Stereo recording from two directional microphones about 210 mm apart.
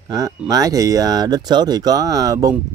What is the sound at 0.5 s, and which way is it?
Speech, 15° right (ahead or behind).